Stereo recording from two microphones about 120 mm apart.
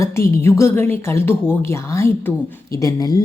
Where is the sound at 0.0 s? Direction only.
25° left (ahead or behind).